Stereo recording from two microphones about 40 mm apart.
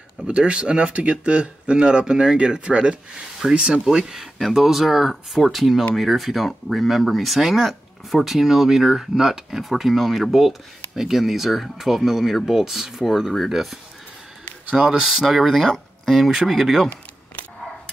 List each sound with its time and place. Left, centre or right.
0.3 s speech: right
3.8 s speech: centre
14.8 s speech: centre